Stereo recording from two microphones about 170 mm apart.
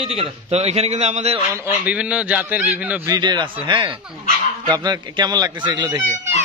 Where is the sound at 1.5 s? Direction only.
5° right (ahead or behind).